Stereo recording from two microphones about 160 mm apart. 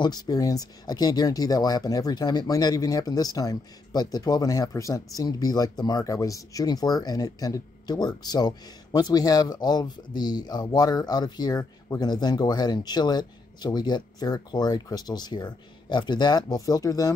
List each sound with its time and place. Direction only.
0.0 s speech: 25° left (ahead or behind)